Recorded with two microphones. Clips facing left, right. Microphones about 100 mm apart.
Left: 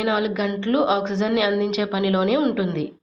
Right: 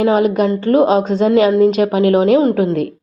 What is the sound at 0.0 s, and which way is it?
A woman's voice, 45° right (ahead or behind).